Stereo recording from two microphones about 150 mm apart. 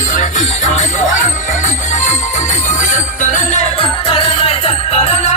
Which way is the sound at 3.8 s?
40° left (ahead or behind).